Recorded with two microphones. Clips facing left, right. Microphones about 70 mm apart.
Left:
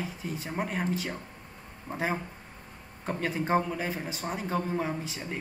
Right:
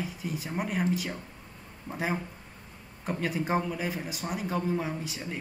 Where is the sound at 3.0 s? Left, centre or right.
Centre.